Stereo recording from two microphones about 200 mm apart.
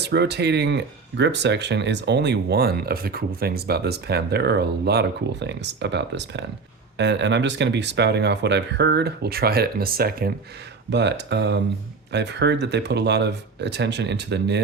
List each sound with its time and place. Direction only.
0.0 s speech: 55° right (ahead or behind)